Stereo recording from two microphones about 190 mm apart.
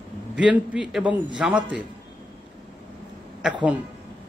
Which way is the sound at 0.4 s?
5° right (ahead or behind).